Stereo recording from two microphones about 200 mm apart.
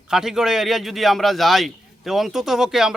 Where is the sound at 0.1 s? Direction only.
Centre (ahead or behind).